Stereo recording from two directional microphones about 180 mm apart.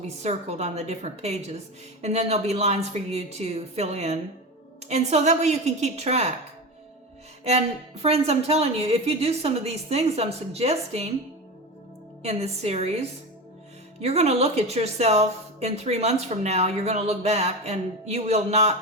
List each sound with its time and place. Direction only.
0.0 s speech: 35° right (ahead or behind)
8.0 s speech: 35° right (ahead or behind)
12.2 s speech: 35° right (ahead or behind)